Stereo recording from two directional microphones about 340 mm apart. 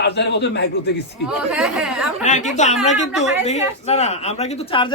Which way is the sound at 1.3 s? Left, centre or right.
Centre.